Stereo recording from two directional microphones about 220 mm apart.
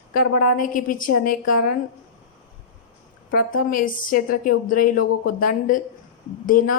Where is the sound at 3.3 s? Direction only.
40° left (ahead or behind).